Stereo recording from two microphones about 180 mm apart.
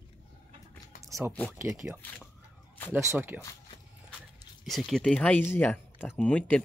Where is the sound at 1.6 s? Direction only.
15° right (ahead or behind).